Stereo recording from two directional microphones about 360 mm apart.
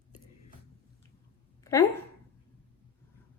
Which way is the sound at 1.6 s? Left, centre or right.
Centre.